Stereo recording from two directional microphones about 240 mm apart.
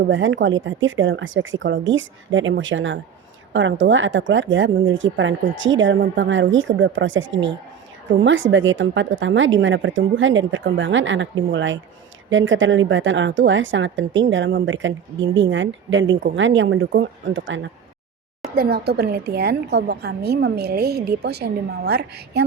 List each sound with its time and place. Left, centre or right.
0.1 s speech: right
18.5 s a woman's voice: right